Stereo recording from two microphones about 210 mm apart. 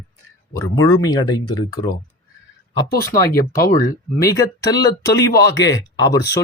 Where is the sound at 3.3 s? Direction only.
15° left (ahead or behind).